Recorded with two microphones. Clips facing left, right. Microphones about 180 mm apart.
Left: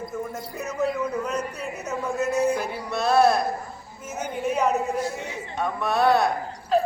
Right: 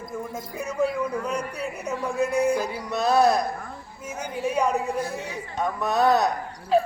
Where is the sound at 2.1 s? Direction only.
15° right (ahead or behind).